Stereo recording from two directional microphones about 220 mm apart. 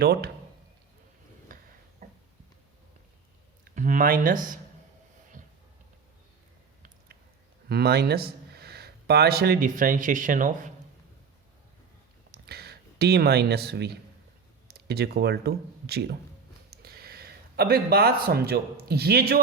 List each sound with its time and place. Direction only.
0.0 s speech: 45° right (ahead or behind)
2.0 s a sound: 40° right (ahead or behind)
3.6 s speech: 35° right (ahead or behind)
7.7 s speech: 45° right (ahead or behind)
12.3 s a sound: 45° right (ahead or behind)
14.7 s speech: 45° right (ahead or behind)